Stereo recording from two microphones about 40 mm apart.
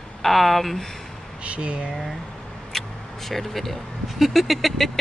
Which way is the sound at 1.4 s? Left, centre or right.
Right.